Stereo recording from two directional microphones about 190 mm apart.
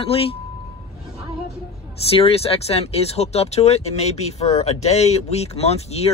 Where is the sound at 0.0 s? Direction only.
30° left (ahead or behind).